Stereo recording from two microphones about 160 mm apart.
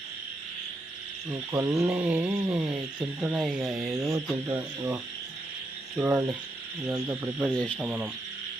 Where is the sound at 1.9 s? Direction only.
10° right (ahead or behind).